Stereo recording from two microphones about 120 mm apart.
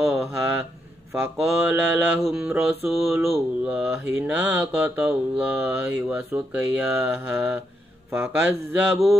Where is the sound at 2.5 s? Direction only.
20° right (ahead or behind).